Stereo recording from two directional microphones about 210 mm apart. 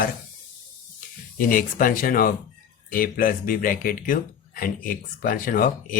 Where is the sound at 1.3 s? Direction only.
40° left (ahead or behind).